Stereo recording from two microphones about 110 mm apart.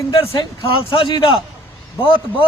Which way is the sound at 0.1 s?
60° left (ahead or behind).